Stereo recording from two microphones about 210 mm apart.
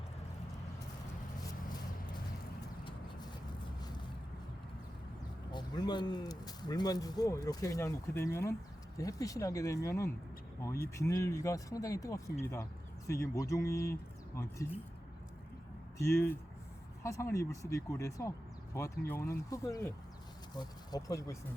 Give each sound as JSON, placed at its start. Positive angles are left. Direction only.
{"t": 5.5, "sound": "speech", "side_deg": 20}
{"t": 16.0, "sound": "speech", "side_deg": 15}